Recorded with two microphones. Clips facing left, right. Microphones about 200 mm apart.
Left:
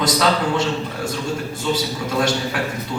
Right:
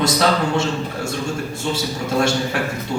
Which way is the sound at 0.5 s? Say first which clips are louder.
Even; 25° right (ahead or behind).